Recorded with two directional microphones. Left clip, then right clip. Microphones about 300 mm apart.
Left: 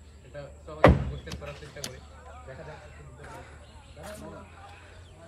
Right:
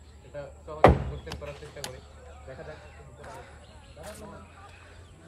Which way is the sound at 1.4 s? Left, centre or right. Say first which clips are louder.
Right 1 dB; right.